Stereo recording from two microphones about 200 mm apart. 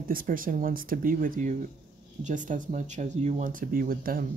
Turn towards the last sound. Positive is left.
turn(degrees=-45)  # may be behind; listen again after turning